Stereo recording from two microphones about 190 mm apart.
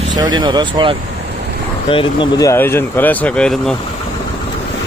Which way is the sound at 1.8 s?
25° left (ahead or behind).